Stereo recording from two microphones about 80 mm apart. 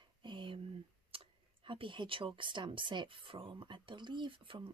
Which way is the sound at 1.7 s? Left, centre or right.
Right.